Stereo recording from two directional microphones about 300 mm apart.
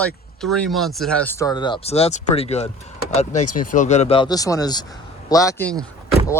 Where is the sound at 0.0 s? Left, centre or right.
Centre.